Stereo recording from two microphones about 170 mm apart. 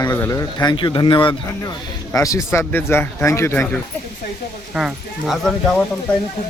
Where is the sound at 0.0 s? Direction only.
10° left (ahead or behind).